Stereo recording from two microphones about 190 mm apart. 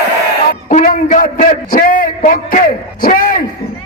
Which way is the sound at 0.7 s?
45° left (ahead or behind).